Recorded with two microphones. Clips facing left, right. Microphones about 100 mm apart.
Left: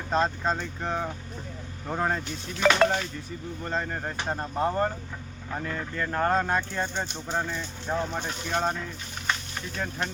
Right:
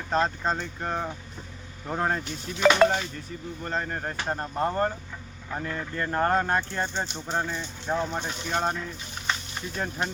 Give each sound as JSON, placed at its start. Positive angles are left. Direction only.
{"t": 0.1, "sound": "speech", "side_deg": 0}
{"t": 6.8, "sound": "speech", "side_deg": -20}
{"t": 7.1, "sound": "speech", "side_deg": -5}